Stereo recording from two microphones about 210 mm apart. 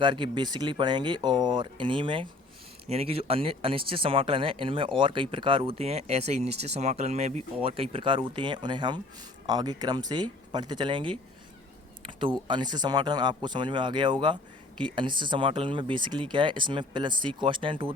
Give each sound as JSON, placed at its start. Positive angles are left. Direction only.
{"t": 0.0, "sound": "speech", "side_deg": -20}